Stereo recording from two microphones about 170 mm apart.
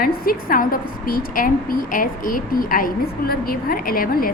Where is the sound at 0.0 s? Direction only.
60° left (ahead or behind).